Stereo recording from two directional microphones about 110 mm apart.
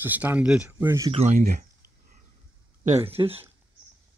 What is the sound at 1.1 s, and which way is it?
Speech, 70° right (ahead or behind).